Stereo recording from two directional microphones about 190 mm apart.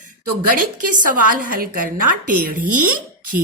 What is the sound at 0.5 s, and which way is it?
A woman's voice, 45° right (ahead or behind).